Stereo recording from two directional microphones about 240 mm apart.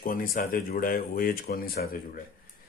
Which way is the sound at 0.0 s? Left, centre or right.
Left.